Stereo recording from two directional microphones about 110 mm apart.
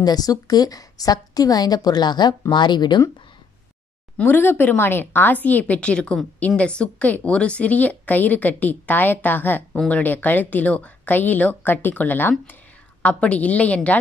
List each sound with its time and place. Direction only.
0.0 s a woman's voice: 35° left (ahead or behind)
4.2 s a woman's voice: 20° left (ahead or behind)